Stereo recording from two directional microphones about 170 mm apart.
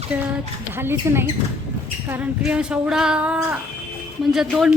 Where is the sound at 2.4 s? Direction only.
5° right (ahead or behind).